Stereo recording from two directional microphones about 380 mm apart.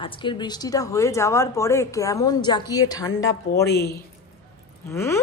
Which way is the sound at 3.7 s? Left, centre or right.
Left.